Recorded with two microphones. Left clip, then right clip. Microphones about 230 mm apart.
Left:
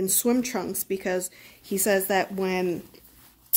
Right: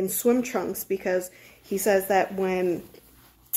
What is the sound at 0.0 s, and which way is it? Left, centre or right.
Speech, left.